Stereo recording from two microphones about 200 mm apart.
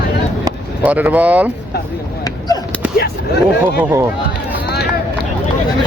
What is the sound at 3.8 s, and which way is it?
Speech, 15° right (ahead or behind).